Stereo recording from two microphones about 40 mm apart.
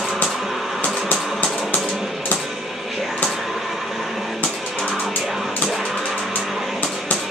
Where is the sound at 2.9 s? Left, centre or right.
Centre.